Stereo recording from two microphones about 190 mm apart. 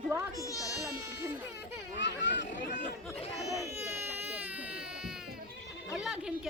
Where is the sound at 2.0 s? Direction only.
65° left (ahead or behind).